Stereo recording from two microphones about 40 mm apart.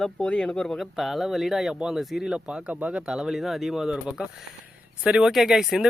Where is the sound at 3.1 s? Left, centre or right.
Centre.